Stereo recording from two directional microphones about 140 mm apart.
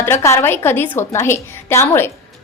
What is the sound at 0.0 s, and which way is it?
A woman's voice, 20° left (ahead or behind).